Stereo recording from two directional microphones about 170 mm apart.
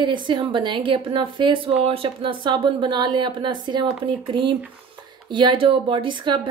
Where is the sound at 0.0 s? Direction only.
30° right (ahead or behind).